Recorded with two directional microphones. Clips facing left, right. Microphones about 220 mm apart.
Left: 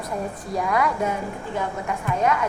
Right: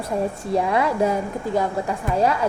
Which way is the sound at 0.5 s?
25° right (ahead or behind).